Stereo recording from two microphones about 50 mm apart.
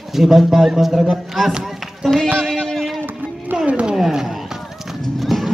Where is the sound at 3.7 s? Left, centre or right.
Right.